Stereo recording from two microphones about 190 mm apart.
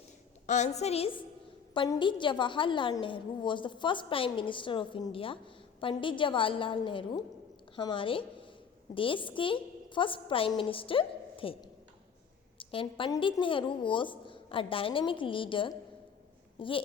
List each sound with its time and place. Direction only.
0.4 s a woman's voice: 40° left (ahead or behind)
16.6 s babbling: 25° left (ahead or behind)